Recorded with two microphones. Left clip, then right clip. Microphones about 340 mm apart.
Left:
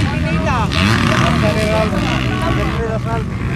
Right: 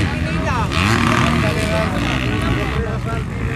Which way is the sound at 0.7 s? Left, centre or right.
Centre.